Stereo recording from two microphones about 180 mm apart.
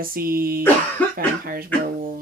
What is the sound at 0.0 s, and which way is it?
Speech, 55° right (ahead or behind).